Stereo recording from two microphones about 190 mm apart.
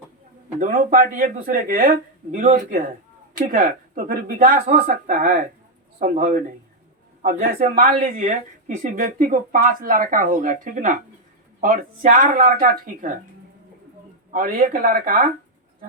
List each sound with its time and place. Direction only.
0.6 s speech: 45° right (ahead or behind)
14.3 s speech: 45° right (ahead or behind)